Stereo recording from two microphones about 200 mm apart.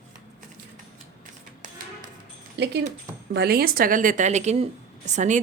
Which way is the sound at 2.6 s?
55° right (ahead or behind).